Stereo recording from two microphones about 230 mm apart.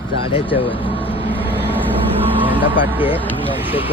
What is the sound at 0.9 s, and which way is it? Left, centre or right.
Vehicle, left.